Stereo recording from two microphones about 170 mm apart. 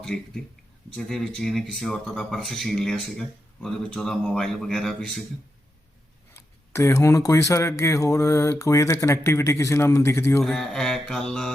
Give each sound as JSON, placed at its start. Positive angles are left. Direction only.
{"t": 0.1, "sound": "speech", "side_deg": 5}
{"t": 6.3, "sound": "speech", "side_deg": 15}
{"t": 10.4, "sound": "speech", "side_deg": 0}